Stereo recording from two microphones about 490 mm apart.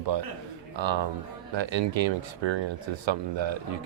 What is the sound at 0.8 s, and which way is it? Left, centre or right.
Speech, right.